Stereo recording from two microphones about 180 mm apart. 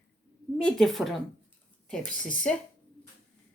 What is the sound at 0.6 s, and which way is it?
Speech, 5° left (ahead or behind).